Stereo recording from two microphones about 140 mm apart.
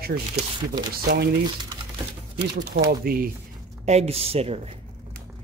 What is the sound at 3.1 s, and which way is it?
Speech, 90° right.